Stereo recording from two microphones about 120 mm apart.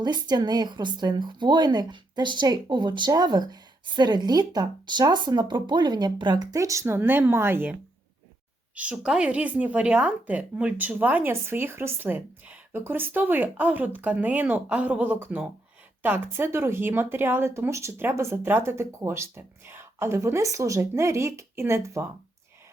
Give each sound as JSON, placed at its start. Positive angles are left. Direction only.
{"t": 0.0, "sound": "a woman's voice", "side_deg": -35}